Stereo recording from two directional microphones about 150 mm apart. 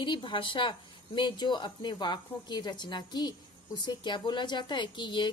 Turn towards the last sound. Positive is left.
turn(degrees=30)  # may be behind; listen again after turning